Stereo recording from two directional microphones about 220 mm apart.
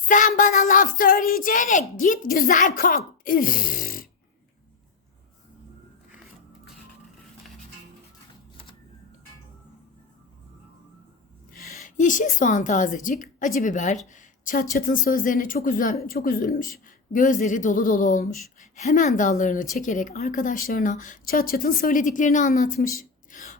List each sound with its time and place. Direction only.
0.1 s a woman's voice: 35° left (ahead or behind)
11.5 s a woman's voice: 35° left (ahead or behind)